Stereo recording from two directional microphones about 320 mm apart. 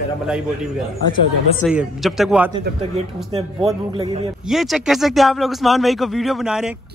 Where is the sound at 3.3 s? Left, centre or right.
Centre.